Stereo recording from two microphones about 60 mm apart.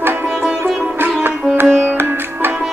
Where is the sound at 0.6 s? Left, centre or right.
Right.